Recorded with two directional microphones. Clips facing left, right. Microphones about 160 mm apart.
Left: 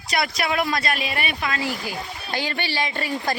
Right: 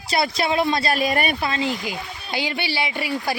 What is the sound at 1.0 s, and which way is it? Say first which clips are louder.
Speech: right 6 dB; 45° right (ahead or behind).